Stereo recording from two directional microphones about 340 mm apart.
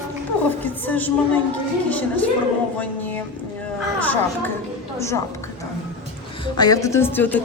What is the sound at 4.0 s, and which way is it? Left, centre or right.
Speech, centre.